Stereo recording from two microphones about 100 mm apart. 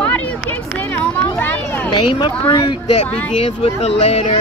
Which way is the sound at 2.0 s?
55° left (ahead or behind).